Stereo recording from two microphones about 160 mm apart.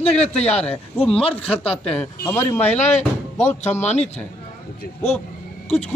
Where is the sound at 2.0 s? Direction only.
15° left (ahead or behind).